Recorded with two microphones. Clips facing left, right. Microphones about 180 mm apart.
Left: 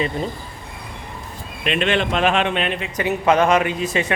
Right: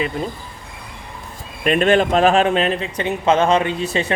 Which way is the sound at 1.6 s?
45° right (ahead or behind).